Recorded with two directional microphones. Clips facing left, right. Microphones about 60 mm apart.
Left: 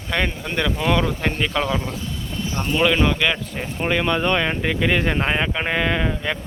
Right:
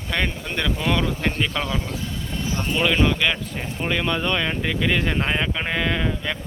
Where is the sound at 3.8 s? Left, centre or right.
Left.